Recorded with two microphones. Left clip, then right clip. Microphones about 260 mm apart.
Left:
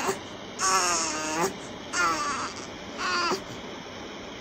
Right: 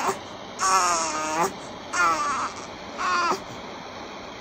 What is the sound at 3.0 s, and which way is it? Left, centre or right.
Crow, centre.